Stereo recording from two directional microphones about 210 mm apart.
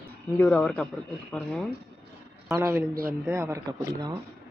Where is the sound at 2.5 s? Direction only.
15° right (ahead or behind).